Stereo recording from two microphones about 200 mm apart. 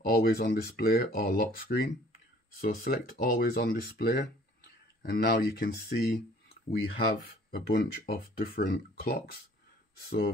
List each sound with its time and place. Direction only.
0.0 s speech: 50° left (ahead or behind)
7.2 s speech: 50° left (ahead or behind)